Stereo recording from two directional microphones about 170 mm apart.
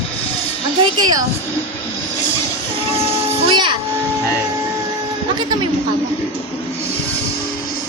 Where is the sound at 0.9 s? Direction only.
25° right (ahead or behind).